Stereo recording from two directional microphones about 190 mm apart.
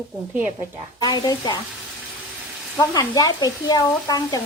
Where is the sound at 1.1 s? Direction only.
25° left (ahead or behind).